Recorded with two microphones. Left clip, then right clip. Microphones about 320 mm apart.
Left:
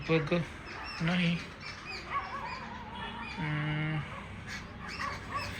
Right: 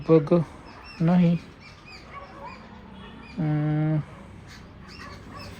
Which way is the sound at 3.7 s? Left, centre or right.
Right.